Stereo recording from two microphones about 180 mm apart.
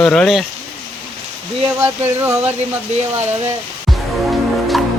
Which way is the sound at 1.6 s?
10° right (ahead or behind).